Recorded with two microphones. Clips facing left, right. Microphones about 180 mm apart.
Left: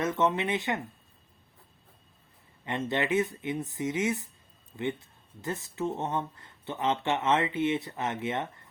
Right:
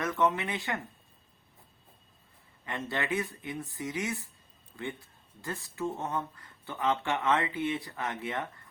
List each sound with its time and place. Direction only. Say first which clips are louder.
0.0 s speech: left 2 dB; 20° left (ahead or behind)
2.6 s speech: left 4 dB; 20° left (ahead or behind)